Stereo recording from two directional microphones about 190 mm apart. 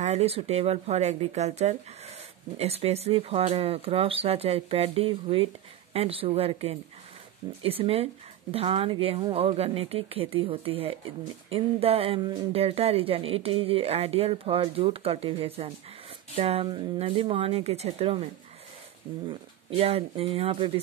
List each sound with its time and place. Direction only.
0.0 s speech: 35° right (ahead or behind)